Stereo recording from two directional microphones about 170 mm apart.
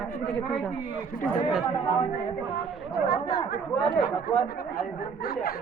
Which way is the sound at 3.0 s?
70° left (ahead or behind).